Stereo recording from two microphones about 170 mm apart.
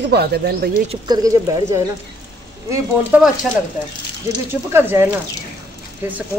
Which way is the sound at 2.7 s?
10° right (ahead or behind).